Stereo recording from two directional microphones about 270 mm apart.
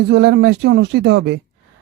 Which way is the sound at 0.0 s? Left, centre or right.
Right.